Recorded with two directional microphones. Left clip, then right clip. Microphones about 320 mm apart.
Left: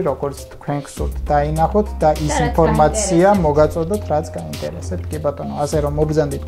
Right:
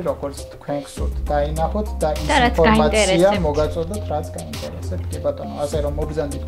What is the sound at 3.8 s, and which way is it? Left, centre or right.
Speech, left.